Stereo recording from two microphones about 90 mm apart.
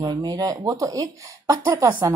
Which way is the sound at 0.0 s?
50° right (ahead or behind).